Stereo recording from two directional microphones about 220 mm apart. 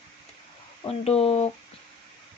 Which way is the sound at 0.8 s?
25° left (ahead or behind).